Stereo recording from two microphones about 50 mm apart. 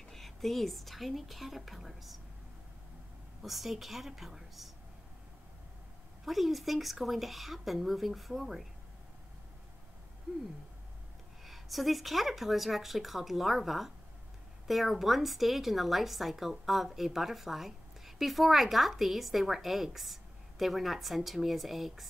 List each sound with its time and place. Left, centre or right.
0.1 s a woman's voice: centre
3.4 s a woman's voice: centre
6.2 s a woman's voice: centre
11.4 s a woman's voice: centre